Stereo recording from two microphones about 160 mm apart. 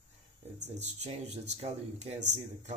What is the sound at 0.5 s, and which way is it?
Speech, 45° right (ahead or behind).